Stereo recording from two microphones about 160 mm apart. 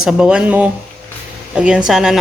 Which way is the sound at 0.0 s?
5° right (ahead or behind).